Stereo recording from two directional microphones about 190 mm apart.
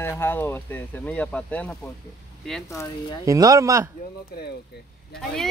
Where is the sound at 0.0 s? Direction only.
10° left (ahead or behind).